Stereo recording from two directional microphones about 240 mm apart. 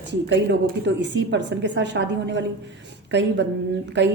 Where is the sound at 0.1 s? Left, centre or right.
Right.